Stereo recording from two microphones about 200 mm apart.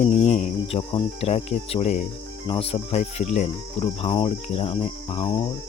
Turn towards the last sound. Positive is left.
turn(degrees=25)  # may be behind; listen again after turning